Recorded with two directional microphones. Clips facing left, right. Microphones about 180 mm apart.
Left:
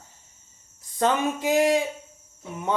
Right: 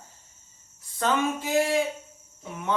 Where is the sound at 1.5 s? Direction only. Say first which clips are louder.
Left 4 dB; 15° left (ahead or behind).